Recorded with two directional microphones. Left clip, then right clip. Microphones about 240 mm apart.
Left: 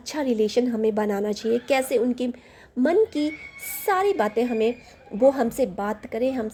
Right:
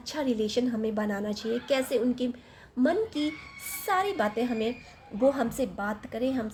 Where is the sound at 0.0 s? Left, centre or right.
Left.